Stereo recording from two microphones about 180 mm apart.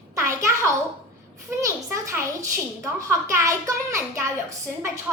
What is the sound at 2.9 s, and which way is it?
A woman's voice, 15° right (ahead or behind).